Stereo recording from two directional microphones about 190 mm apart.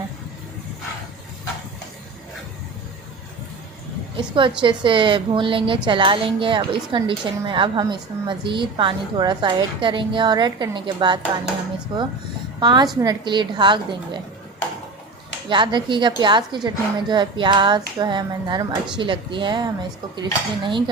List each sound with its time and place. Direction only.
4.2 s a woman's voice: 25° right (ahead or behind)
15.4 s a woman's voice: 25° right (ahead or behind)